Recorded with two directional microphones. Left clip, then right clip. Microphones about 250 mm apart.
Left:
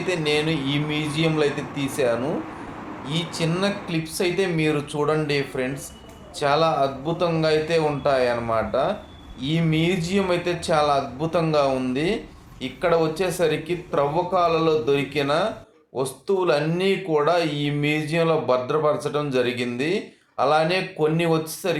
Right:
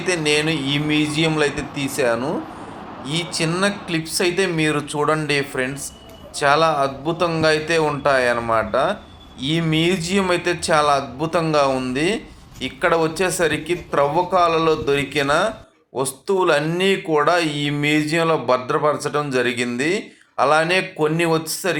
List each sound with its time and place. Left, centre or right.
0.1 s speech: centre